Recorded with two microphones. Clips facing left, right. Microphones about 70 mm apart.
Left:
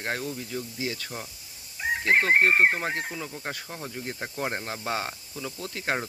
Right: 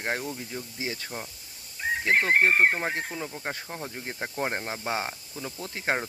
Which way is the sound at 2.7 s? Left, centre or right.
Right.